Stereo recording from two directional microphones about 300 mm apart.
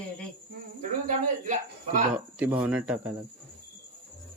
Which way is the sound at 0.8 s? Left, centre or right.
Right.